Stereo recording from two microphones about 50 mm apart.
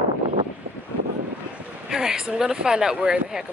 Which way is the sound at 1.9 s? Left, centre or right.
Centre.